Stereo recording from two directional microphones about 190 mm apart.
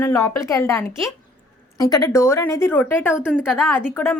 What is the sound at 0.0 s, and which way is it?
Speech, 15° left (ahead or behind).